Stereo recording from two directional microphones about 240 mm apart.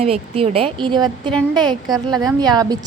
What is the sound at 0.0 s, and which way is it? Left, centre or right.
A woman's voice, right.